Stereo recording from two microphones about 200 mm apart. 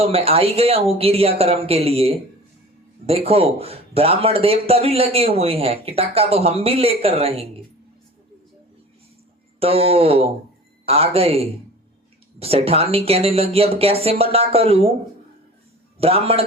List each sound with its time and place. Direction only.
0.0 s speech: 30° right (ahead or behind)
9.6 s speech: 30° right (ahead or behind)
16.0 s speech: 30° right (ahead or behind)